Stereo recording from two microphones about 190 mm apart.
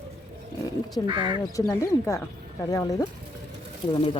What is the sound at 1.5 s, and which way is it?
Speech, 15° left (ahead or behind).